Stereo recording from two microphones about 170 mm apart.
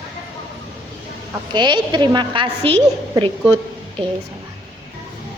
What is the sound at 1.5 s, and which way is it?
A woman's voice, 25° right (ahead or behind).